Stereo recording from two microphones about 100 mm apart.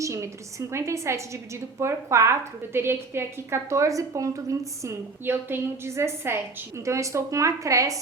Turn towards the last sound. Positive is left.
turn(degrees=-30)  # may be behind; listen again after turning